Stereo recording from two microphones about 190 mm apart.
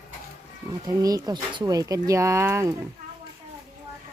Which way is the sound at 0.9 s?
20° right (ahead or behind).